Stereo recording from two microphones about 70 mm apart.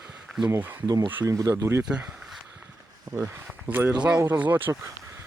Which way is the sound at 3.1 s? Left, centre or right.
Right.